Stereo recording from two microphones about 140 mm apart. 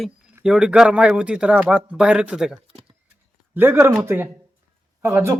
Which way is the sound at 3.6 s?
15° right (ahead or behind).